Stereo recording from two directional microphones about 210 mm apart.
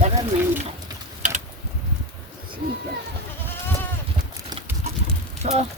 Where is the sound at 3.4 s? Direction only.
10° left (ahead or behind).